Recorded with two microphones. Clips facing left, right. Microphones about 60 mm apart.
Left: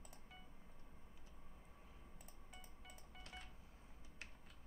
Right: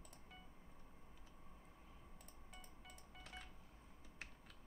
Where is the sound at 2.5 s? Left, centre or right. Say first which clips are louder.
Even; centre.